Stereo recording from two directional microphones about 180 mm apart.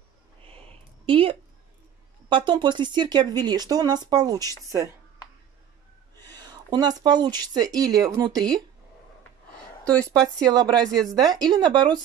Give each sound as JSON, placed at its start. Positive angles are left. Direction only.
{"t": 1.0, "sound": "speech", "side_deg": -30}
{"t": 6.3, "sound": "speech", "side_deg": -20}
{"t": 9.8, "sound": "speech", "side_deg": 5}
{"t": 10.5, "sound": "speech", "side_deg": -20}